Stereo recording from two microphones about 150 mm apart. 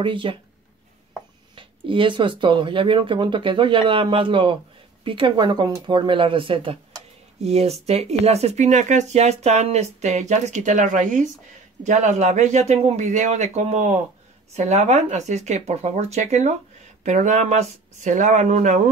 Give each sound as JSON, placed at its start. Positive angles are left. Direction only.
{"t": 0.0, "sound": "speech", "side_deg": -35}
{"t": 1.5, "sound": "speech", "side_deg": -35}